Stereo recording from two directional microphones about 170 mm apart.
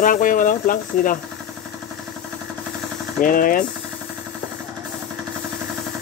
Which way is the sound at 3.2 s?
55° left (ahead or behind).